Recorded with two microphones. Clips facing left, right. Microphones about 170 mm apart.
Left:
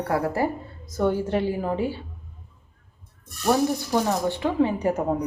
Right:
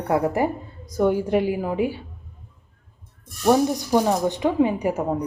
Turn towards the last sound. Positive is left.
turn(degrees=0)  # may be behind; listen again after turning